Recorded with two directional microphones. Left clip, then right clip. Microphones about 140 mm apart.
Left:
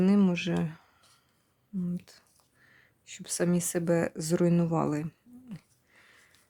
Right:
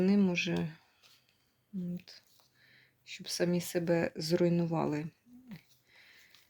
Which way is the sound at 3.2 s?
35° left (ahead or behind).